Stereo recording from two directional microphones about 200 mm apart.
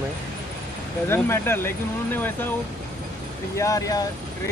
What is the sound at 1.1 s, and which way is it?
Speech, 10° left (ahead or behind).